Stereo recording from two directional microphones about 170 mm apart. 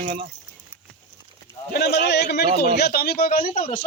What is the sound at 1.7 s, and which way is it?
A man's voice, 65° left (ahead or behind).